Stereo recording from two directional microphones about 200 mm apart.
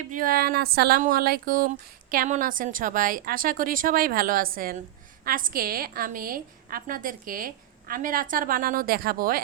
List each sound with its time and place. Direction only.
0.1 s speech: 45° right (ahead or behind)